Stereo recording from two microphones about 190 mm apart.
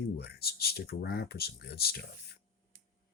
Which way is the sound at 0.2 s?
55° left (ahead or behind).